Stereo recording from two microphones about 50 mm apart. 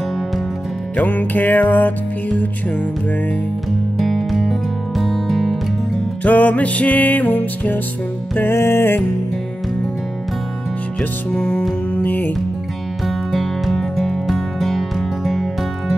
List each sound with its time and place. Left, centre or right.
0.9 s music: left
4.0 s music: centre
6.2 s music: left
8.5 s music: left
11.0 s music: left
11.9 s music: left
13.0 s music: centre